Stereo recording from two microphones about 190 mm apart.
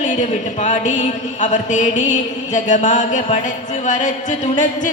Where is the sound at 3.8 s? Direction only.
40° left (ahead or behind).